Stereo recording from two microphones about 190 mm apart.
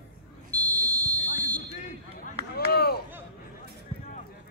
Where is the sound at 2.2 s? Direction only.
55° left (ahead or behind).